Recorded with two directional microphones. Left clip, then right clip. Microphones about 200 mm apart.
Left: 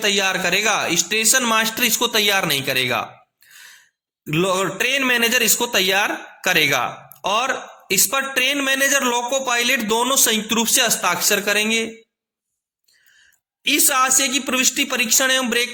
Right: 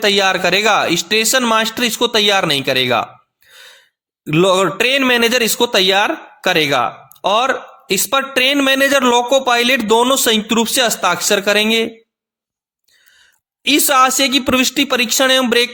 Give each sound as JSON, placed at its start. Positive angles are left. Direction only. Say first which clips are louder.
{"t": 0.0, "sound": "speech", "louder": "right 5 dB", "side_deg": -30}
{"t": 3.5, "sound": "a sound", "louder": "right 3 dB", "side_deg": -30}
{"t": 4.3, "sound": "a man's voice", "louder": "right 7 dB", "side_deg": -30}
{"t": 13.7, "sound": "a man's voice", "louder": "right 6 dB", "side_deg": -30}